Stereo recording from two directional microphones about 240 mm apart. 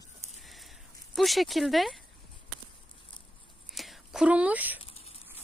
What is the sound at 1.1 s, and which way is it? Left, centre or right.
Speech, centre.